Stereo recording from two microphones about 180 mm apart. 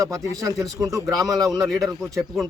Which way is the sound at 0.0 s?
15° right (ahead or behind).